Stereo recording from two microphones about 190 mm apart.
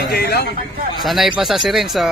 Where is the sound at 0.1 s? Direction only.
55° left (ahead or behind).